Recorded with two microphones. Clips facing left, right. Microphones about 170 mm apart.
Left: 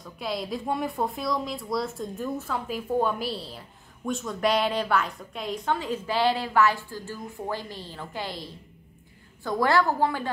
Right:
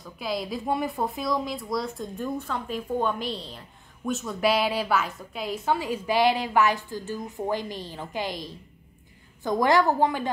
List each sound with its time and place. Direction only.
0.0 s a woman's voice: centre (ahead or behind); by 10.3 s 20° right (ahead or behind)